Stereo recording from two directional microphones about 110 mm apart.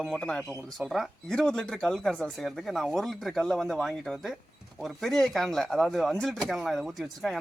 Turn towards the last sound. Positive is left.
turn(degrees=0)  # may be behind; listen again after turning